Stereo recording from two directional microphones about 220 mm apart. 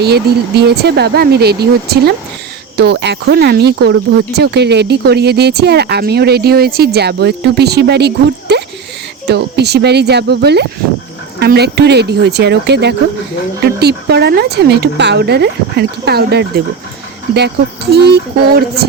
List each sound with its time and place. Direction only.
0.0 s speech: 45° right (ahead or behind)
17.9 s speech: 45° right (ahead or behind)